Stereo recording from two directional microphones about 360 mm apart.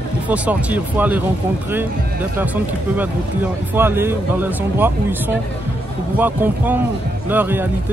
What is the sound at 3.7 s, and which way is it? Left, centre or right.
Speech, centre.